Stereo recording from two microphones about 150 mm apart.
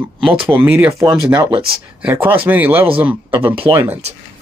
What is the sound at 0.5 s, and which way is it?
Speech, 10° right (ahead or behind).